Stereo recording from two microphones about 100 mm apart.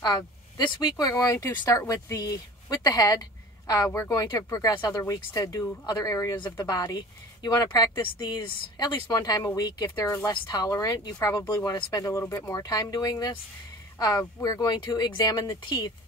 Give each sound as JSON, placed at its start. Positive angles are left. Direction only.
{"t": 0.0, "sound": "speech", "side_deg": 45}
{"t": 8.0, "sound": "speech", "side_deg": 55}
{"t": 9.1, "sound": "speech", "side_deg": 40}
{"t": 10.0, "sound": "speech", "side_deg": 25}
{"t": 10.3, "sound": "speech", "side_deg": 40}